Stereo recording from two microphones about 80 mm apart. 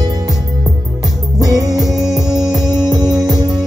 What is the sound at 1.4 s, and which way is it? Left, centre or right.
Music, right.